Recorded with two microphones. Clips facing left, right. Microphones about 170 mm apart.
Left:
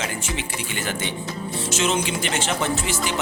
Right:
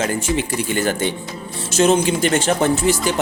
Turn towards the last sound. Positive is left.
turn(degrees=-45)  # may be behind; listen again after turning